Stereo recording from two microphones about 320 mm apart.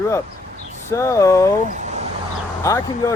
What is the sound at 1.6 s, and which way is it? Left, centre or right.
Speech, right.